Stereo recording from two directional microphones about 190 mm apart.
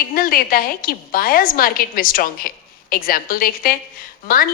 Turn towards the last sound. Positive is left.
turn(degrees=50)  # may be behind; listen again after turning